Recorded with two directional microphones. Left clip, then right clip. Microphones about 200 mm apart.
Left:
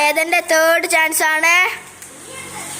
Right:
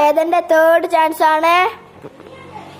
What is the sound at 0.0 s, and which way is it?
Speech, 5° right (ahead or behind).